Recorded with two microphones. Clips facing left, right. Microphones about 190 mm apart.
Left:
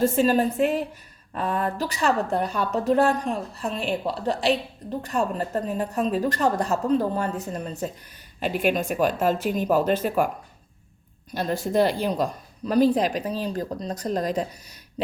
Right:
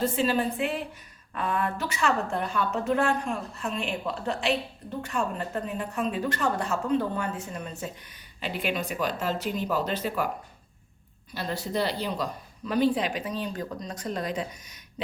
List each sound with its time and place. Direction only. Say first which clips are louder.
0.0 s a woman's voice: left 5 dB; 45° left (ahead or behind)
11.3 s a woman's voice: left 7 dB; 50° left (ahead or behind)